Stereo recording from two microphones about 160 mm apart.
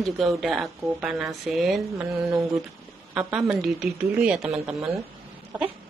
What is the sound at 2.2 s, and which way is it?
Speech, 20° right (ahead or behind).